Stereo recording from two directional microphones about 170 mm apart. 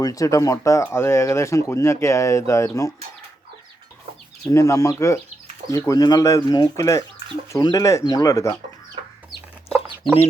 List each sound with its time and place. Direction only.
0.0 s speech: 20° left (ahead or behind)
4.5 s speech: 20° left (ahead or behind)